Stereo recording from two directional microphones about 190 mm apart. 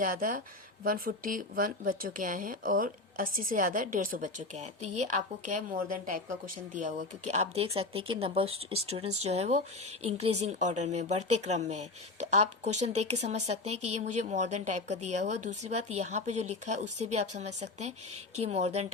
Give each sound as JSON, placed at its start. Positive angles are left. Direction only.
{"t": 0.0, "sound": "speech", "side_deg": -45}